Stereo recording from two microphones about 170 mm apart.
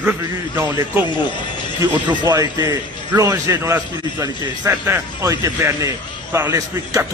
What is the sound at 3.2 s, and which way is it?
A man's voice, 20° right (ahead or behind).